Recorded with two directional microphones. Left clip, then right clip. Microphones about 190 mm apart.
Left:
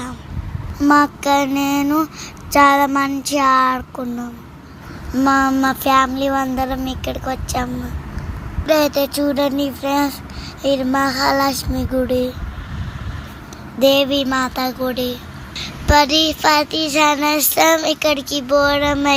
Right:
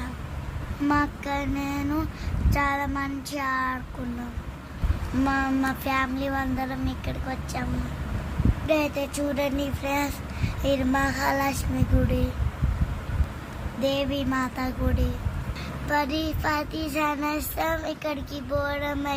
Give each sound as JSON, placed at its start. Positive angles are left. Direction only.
{"t": 0.9, "sound": "child singing", "side_deg": 35}
{"t": 5.1, "sound": "child singing", "side_deg": 25}
{"t": 13.8, "sound": "child singing", "side_deg": 30}